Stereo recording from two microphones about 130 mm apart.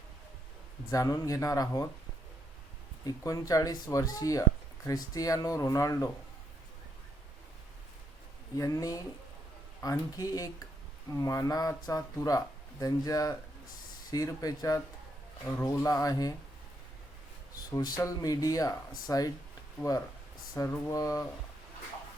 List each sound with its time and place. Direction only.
0.9 s speech: 25° left (ahead or behind)
3.1 s speech: 25° left (ahead or behind)
8.5 s speech: 25° left (ahead or behind)
17.7 s speech: 30° left (ahead or behind)
20.7 s speech: 25° left (ahead or behind)